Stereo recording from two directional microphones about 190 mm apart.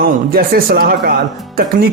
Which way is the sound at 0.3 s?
50° right (ahead or behind).